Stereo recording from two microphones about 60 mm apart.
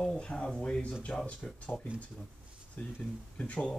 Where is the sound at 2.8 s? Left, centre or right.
Left.